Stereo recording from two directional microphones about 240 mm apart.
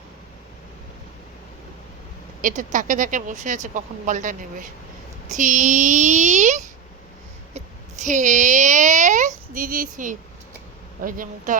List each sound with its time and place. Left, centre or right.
2.4 s speech: right
7.5 s a sound: right
11.0 s speech: right